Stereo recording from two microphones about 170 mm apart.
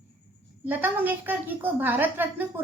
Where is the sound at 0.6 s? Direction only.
10° right (ahead or behind).